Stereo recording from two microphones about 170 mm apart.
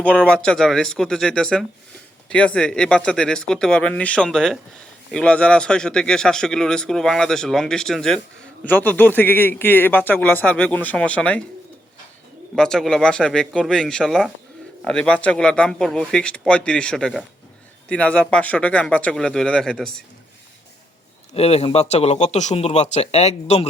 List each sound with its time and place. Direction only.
0.4 s a man's voice: 5° left (ahead or behind)
12.5 s a man's voice: 5° left (ahead or behind)
21.3 s speech: 35° left (ahead or behind)